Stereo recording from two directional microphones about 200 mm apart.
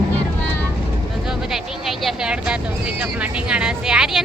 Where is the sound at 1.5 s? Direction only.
Centre (ahead or behind).